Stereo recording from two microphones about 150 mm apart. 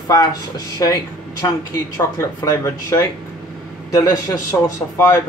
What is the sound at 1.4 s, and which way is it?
Speech, 20° left (ahead or behind).